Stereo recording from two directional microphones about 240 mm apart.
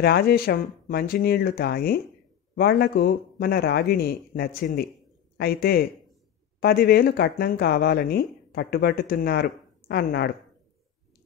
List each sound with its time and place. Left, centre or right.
0.0 s speech: left